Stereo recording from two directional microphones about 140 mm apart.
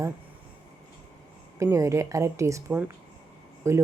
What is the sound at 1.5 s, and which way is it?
Speech, 20° right (ahead or behind).